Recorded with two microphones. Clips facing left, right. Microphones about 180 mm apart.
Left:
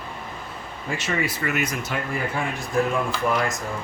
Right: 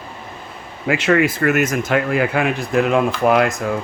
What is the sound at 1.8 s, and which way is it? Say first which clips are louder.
Speech: right 10 dB; 90° right.